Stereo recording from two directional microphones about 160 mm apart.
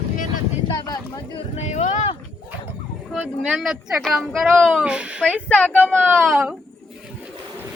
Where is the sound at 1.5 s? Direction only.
45° left (ahead or behind).